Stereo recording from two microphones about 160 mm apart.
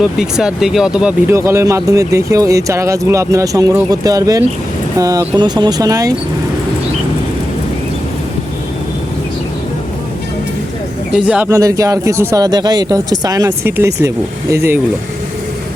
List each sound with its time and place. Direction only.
0.0 s speech: 5° right (ahead or behind)
1.3 s speech: 15° right (ahead or behind)
11.1 s speech: 10° right (ahead or behind)